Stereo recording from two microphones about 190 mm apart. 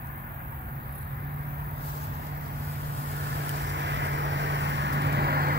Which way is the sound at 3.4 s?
70° right (ahead or behind).